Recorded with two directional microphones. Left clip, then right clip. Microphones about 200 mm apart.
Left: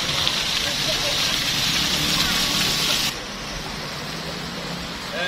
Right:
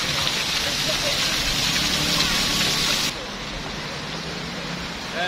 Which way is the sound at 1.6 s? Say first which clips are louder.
Left 1 dB; 50° right (ahead or behind).